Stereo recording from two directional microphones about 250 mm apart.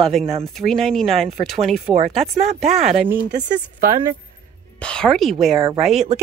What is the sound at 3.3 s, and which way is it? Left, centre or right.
Speech, right.